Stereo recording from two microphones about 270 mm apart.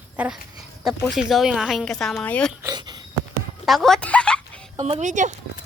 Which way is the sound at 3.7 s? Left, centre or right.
Centre.